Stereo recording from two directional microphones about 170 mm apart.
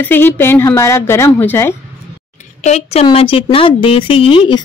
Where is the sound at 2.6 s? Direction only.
40° left (ahead or behind).